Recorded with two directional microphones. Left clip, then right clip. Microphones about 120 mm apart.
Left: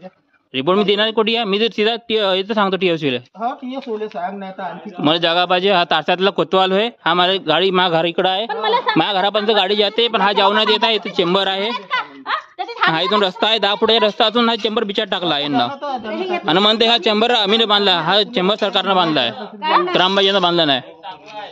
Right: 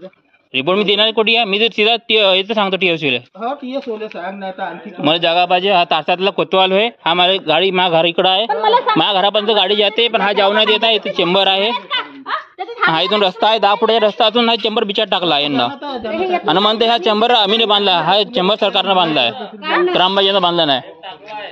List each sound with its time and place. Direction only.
0.6 s speech: 45° left (ahead or behind)
1.9 s speech: 30° left (ahead or behind); by 3.2 s 50° left (ahead or behind)
5.0 s speech: 45° left (ahead or behind); by 6.3 s 60° left (ahead or behind)
6.3 s speech: 40° left (ahead or behind)
6.6 s speech: 30° left (ahead or behind)
7.9 s a man's voice: 15° left (ahead or behind)
11.9 s speech: 45° left (ahead or behind)
12.9 s a man's voice: 15° left (ahead or behind)
13.7 s a man's voice: 30° left (ahead or behind); by 15.7 s 10° left (ahead or behind)
16.1 s speech: 75° left (ahead or behind)
16.4 s a man's voice: 35° left (ahead or behind)
19.9 s speech: 35° left (ahead or behind)